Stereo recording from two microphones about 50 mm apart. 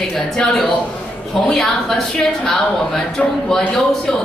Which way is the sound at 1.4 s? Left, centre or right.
Centre.